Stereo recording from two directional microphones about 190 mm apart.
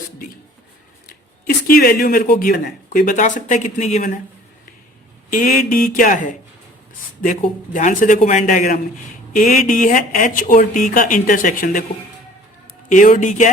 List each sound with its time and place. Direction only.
1.5 s speech: 50° left (ahead or behind)
5.3 s speech: 45° left (ahead or behind)
12.9 s speech: 40° left (ahead or behind)